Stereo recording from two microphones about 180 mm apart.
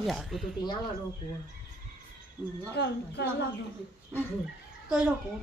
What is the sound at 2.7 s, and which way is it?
Speech, 70° left (ahead or behind).